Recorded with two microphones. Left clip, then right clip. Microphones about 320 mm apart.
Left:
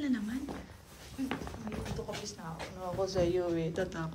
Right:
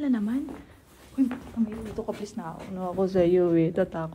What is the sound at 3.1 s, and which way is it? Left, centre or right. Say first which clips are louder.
A woman's voice: right 11 dB; centre.